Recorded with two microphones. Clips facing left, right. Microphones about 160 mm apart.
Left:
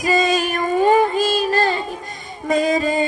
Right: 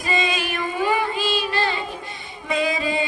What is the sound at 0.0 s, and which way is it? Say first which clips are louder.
Female singing: left 6 dB; 45° left (ahead or behind).